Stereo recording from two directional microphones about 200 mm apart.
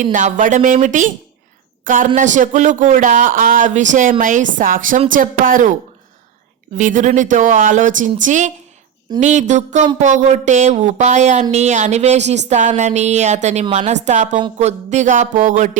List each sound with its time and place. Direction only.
0.0 s a woman's voice: 40° right (ahead or behind)
6.7 s speech: 40° right (ahead or behind)